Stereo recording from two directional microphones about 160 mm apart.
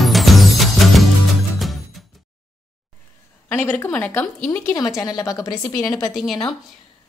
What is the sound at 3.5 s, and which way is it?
A woman's voice, 10° left (ahead or behind).